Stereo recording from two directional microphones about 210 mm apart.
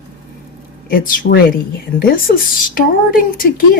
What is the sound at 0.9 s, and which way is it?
A woman's voice, 45° left (ahead or behind).